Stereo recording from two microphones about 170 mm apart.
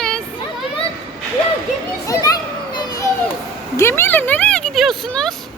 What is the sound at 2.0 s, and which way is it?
Children playing, 20° left (ahead or behind).